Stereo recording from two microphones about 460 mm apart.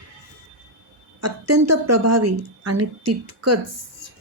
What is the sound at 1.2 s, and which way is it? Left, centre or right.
Speech, right.